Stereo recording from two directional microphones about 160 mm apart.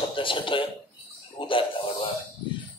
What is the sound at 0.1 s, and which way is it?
A man's voice, 30° left (ahead or behind).